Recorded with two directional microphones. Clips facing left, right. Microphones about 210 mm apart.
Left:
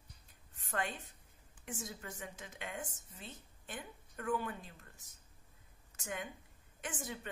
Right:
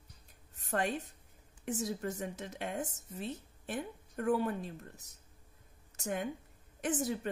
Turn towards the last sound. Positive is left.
turn(degrees=-35)  # may be behind; listen again after turning